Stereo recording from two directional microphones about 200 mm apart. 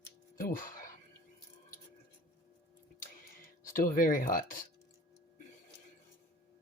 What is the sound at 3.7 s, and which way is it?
Speech, 45° left (ahead or behind).